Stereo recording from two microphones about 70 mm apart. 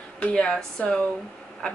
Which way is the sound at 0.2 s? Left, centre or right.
Centre.